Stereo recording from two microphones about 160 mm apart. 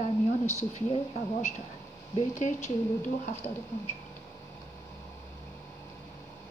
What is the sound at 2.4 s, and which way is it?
Speech, 50° left (ahead or behind).